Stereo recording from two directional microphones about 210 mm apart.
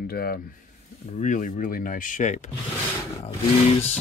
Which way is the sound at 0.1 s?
45° left (ahead or behind).